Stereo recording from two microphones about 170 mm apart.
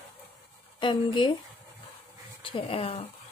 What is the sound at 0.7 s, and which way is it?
Speech, 25° left (ahead or behind).